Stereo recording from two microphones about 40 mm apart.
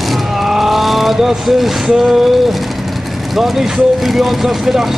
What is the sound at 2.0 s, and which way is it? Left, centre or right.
Speech, centre.